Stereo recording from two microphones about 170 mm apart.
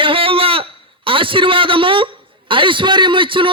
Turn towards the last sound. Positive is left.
turn(degrees=-30)  # may be behind; listen again after turning